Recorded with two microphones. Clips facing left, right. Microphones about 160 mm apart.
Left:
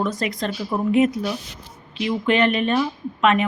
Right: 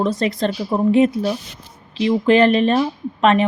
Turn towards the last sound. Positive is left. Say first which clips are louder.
# right 3 dB
turn(degrees=-35)  # may be behind; listen again after turning